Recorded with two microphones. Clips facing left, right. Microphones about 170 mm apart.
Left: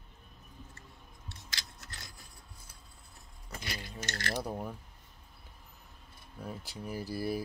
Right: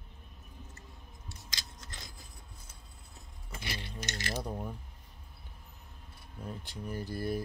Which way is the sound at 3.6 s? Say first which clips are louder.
Right 1 dB; 25° right (ahead or behind).